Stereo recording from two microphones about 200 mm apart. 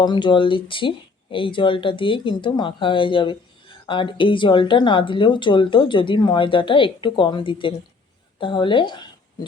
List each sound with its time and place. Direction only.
0.0 s speech: 20° left (ahead or behind)